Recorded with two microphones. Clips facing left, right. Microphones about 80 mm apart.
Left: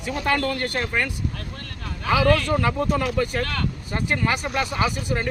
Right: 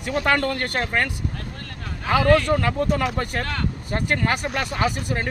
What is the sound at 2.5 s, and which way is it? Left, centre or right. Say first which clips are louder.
Speech: right 1 dB; right.